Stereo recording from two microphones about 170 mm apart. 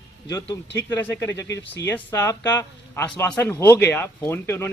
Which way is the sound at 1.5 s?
90° left.